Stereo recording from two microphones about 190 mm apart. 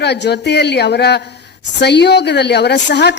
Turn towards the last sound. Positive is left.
turn(degrees=65)  # may be behind; listen again after turning